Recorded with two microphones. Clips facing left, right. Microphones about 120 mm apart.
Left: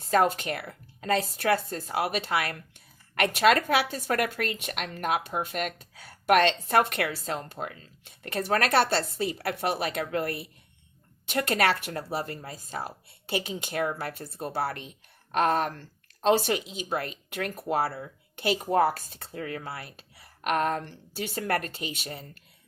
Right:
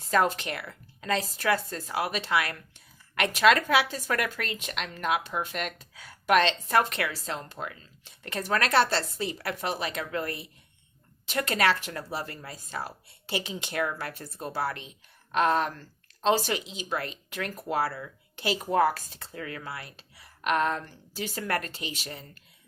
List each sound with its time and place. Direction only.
0.1 s a woman's voice: 45° left (ahead or behind)
2.7 s a sound: 50° left (ahead or behind)
3.5 s a woman's voice: 45° left (ahead or behind)
7.3 s a woman's voice: 45° left (ahead or behind)
12.1 s a woman's voice: 40° left (ahead or behind)
13.5 s a woman's voice: 40° left (ahead or behind)
17.7 s speech: 30° left (ahead or behind)
18.3 s a woman's voice: 45° left (ahead or behind)
20.2 s a woman's voice: 45° left (ahead or behind)